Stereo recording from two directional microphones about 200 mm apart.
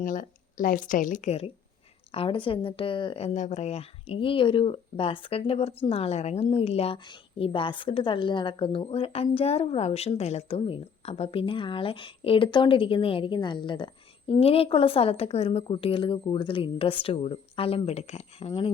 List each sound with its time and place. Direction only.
0.0 s a woman's voice: 40° left (ahead or behind)